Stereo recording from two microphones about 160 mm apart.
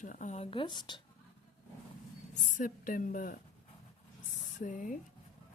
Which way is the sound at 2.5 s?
55° left (ahead or behind).